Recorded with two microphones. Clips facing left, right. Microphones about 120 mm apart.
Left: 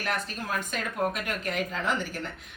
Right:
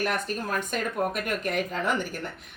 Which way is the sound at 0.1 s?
50° right (ahead or behind).